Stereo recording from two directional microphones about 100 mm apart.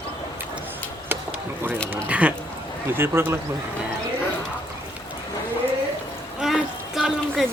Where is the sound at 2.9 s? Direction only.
25° right (ahead or behind).